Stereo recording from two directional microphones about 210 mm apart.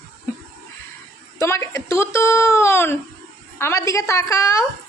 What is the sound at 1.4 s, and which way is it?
Speech, 15° left (ahead or behind).